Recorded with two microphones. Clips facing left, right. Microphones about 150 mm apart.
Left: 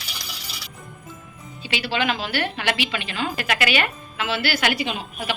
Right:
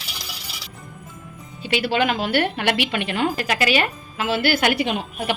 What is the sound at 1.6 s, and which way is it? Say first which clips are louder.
A woman's voice: right 4 dB; 50° right (ahead or behind).